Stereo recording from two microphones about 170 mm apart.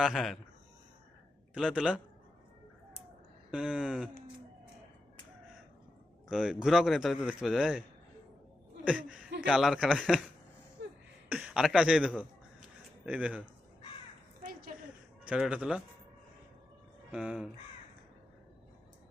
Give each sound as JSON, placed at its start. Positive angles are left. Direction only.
{"t": 0.0, "sound": "a man's voice", "side_deg": 0}
{"t": 1.5, "sound": "a man's voice", "side_deg": 0}
{"t": 3.5, "sound": "a man's voice", "side_deg": -5}
{"t": 6.3, "sound": "a man's voice", "side_deg": -5}
{"t": 10.8, "sound": "throat clearing", "side_deg": -90}
{"t": 11.3, "sound": "a man's voice", "side_deg": -5}
{"t": 15.2, "sound": "speech", "side_deg": -5}
{"t": 17.1, "sound": "a man's voice", "side_deg": -5}